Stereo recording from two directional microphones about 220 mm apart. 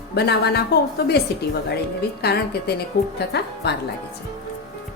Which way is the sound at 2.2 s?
45° left (ahead or behind).